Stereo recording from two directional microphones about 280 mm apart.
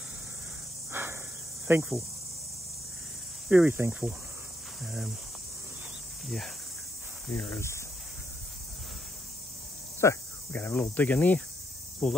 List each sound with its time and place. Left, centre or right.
0.9 s a sound: centre
1.7 s speech: centre
3.4 s speech: centre
6.2 s speech: centre
9.9 s cricket: centre
12.0 s speech: centre